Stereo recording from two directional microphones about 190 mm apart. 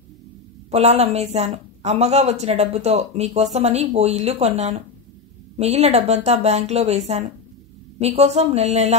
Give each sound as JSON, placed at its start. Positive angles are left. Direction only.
{"t": 0.7, "sound": "a woman's voice", "side_deg": -35}
{"t": 8.0, "sound": "a woman's voice", "side_deg": -35}